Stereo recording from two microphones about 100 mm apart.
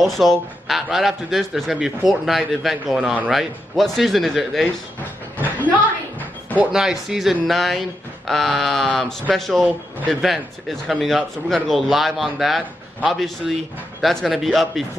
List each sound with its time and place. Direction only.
0.0 s a man's voice: centre (ahead or behind)
5.6 s a sound: 15° left (ahead or behind)
6.6 s a man's voice: 5° right (ahead or behind)